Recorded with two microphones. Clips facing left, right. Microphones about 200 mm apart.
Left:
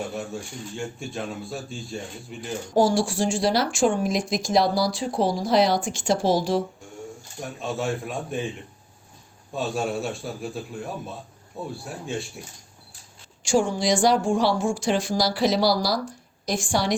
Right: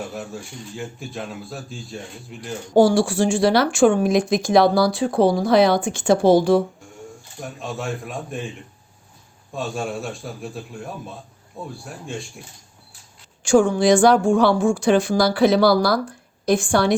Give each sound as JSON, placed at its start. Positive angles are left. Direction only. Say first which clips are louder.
{"t": 0.1, "sound": "speech", "louder": "even", "side_deg": 0}
{"t": 2.7, "sound": "speech", "louder": "right 5 dB", "side_deg": -60}
{"t": 7.4, "sound": "speech", "louder": "left 1 dB", "side_deg": 0}
{"t": 9.6, "sound": "speech", "louder": "even", "side_deg": 0}
{"t": 13.4, "sound": "speech", "louder": "right 6 dB", "side_deg": -55}